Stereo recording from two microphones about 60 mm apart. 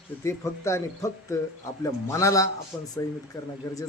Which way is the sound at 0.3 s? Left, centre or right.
Left.